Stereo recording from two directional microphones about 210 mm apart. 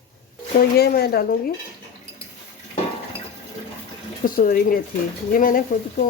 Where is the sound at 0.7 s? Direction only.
50° left (ahead or behind).